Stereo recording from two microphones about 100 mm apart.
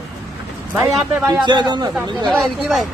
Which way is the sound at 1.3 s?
45° right (ahead or behind).